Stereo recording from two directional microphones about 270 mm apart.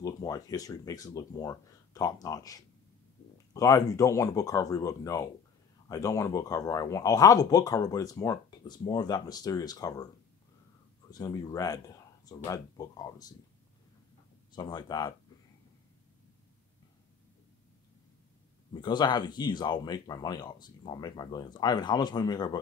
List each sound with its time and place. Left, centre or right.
0.0 s speech: centre
11.1 s speech: centre
14.5 s speech: centre
18.7 s speech: centre